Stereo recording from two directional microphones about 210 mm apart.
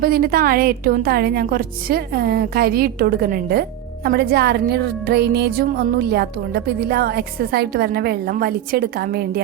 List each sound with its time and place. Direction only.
0.0 s a woman's voice: 45° right (ahead or behind)